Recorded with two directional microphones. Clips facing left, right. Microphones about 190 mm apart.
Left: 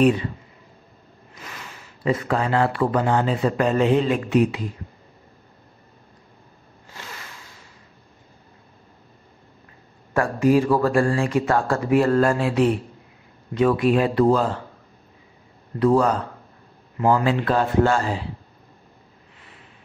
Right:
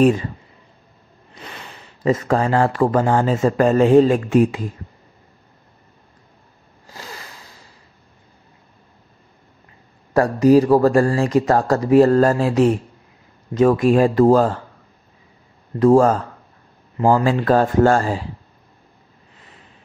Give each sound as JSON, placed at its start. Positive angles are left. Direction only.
{"t": 0.0, "sound": "speech", "side_deg": -40}
{"t": 1.3, "sound": "speech", "side_deg": -30}
{"t": 6.9, "sound": "a sound", "side_deg": -35}
{"t": 10.1, "sound": "speech", "side_deg": -40}
{"t": 15.8, "sound": "speech", "side_deg": -45}